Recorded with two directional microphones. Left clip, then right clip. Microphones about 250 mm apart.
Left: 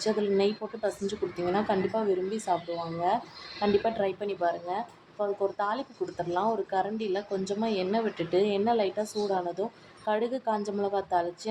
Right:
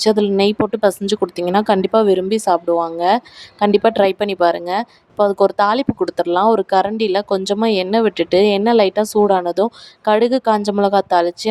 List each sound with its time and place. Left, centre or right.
0.0 s a woman's voice: right
3.6 s a woman's voice: right